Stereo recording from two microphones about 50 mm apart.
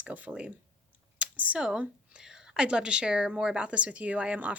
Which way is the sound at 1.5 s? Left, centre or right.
Centre.